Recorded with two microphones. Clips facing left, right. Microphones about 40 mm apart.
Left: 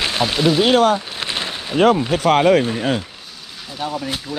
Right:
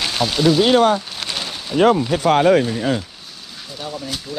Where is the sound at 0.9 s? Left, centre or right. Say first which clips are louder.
Left 1 dB; left.